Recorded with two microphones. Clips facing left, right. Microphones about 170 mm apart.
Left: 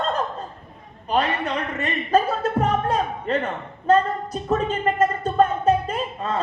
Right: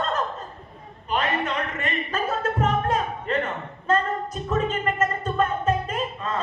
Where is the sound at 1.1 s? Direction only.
35° left (ahead or behind).